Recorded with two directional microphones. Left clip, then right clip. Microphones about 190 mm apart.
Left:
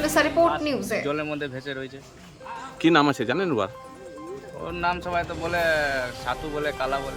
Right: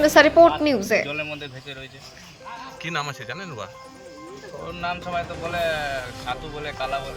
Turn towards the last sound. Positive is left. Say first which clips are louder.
# left 2 dB
turn(degrees=20)  # may be behind; listen again after turning